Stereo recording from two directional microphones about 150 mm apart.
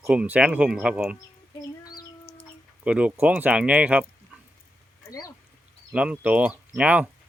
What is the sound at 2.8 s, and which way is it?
Speech, 10° right (ahead or behind).